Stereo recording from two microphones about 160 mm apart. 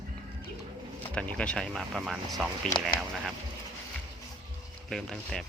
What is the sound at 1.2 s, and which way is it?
Speech, 5° left (ahead or behind).